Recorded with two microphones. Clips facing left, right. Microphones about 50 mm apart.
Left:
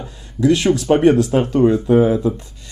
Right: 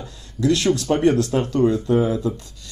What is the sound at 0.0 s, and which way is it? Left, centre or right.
Speech, centre.